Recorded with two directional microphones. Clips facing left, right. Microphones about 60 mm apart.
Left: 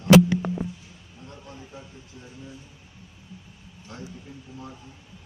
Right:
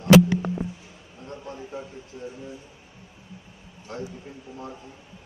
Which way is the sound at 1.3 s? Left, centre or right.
Right.